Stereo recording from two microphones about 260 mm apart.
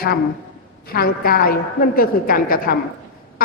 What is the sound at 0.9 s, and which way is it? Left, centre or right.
A woman's voice, left.